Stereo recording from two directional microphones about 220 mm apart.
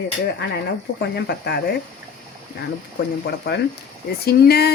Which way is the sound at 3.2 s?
50° left (ahead or behind).